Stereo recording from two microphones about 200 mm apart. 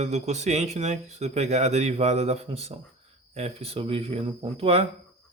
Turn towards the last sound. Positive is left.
turn(degrees=-30)  # may be behind; listen again after turning